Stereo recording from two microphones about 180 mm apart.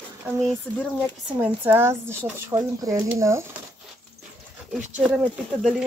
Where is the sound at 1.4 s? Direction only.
10° right (ahead or behind).